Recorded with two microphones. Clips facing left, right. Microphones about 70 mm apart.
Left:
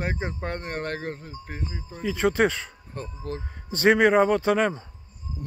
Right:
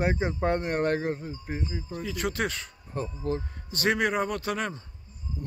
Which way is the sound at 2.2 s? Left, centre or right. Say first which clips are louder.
Left 9 dB; left.